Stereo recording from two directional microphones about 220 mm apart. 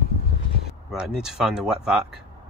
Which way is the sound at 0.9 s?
5° right (ahead or behind).